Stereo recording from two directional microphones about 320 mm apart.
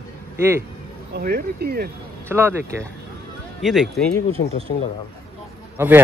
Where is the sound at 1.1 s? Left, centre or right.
Right.